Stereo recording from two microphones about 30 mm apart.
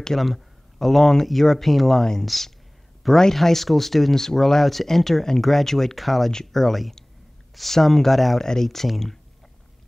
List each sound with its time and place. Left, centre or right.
0.2 s a man's voice: centre
8.4 s speech: centre
8.6 s speech: centre